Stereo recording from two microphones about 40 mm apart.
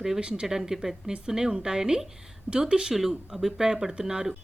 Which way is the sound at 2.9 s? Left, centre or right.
Centre.